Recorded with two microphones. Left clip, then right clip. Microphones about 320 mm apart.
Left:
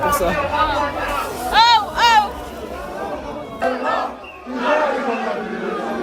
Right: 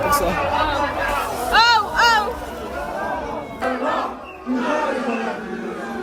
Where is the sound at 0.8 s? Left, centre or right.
Centre.